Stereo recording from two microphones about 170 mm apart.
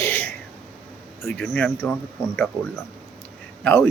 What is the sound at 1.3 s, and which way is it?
Speech, 5° left (ahead or behind).